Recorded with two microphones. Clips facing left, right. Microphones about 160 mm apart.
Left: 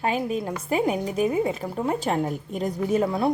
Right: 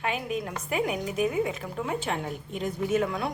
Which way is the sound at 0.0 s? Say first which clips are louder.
Left 5 dB; 35° left (ahead or behind).